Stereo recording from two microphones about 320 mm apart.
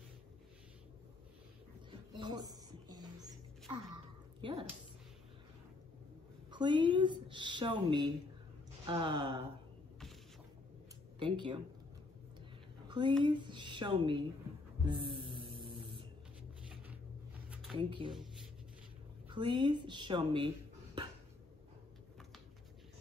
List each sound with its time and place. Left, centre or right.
1.9 s music: centre
4.4 s speech: centre
6.5 s a woman's voice: centre
11.1 s speech: centre
12.8 s a sound: centre
13.2 s a woman's voice: centre
14.9 s hum: centre
15.5 s a sound: centre
17.7 s a woman's voice: centre
18.1 s a sound: centre
19.2 s speech: centre